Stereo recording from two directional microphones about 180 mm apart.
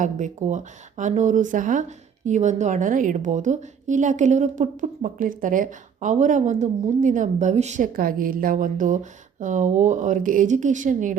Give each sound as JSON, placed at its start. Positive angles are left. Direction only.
{"t": 0.0, "sound": "speech", "side_deg": -45}